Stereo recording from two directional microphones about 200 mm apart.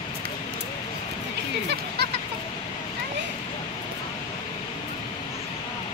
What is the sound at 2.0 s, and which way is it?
Fowl, 55° right (ahead or behind).